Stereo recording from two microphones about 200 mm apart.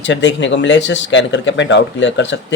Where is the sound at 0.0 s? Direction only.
65° left (ahead or behind).